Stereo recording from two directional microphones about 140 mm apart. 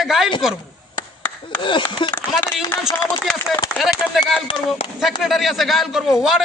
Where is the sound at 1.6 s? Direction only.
35° left (ahead or behind).